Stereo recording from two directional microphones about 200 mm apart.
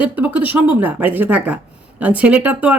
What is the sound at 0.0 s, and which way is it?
A woman's voice, 5° right (ahead or behind).